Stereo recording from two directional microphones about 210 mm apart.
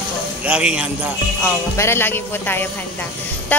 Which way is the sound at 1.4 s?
10° left (ahead or behind).